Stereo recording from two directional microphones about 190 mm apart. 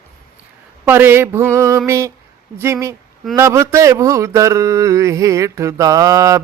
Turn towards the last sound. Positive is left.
turn(degrees=-15)  # may be behind; listen again after turning